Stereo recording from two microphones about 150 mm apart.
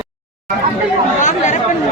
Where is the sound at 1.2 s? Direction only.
55° left (ahead or behind).